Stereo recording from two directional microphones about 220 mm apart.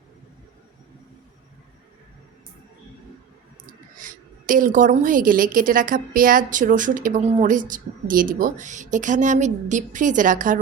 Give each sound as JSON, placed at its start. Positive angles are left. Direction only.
{"t": 3.9, "sound": "a woman's voice", "side_deg": -35}